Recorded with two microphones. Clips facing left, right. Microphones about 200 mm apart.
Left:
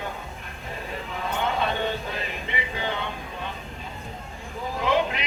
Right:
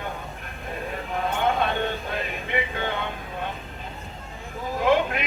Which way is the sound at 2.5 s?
55° right (ahead or behind).